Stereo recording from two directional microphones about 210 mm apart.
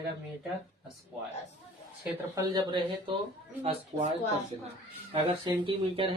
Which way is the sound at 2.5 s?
20° right (ahead or behind).